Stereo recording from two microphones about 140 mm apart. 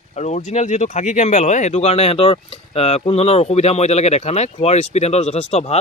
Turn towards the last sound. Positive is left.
turn(degrees=50)  # may be behind; listen again after turning